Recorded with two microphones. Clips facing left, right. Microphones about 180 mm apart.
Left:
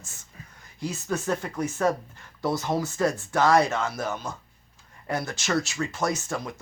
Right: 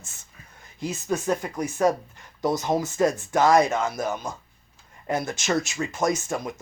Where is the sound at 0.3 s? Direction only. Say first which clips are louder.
Left 6 dB; 35° left (ahead or behind).